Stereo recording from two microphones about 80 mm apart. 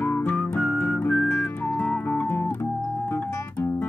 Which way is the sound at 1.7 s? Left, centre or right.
Centre.